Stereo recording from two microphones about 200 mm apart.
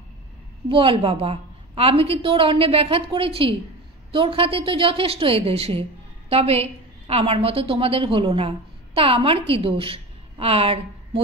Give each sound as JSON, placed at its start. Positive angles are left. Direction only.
{"t": 0.7, "sound": "a woman's voice", "side_deg": -25}